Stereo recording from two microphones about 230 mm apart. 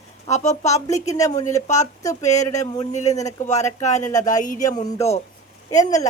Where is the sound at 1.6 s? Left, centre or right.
Left.